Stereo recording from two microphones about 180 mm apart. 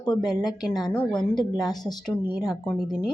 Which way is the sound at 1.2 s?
Centre (ahead or behind).